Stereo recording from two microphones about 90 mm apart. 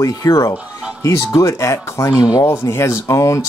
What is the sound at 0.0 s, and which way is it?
Speech, 35° left (ahead or behind).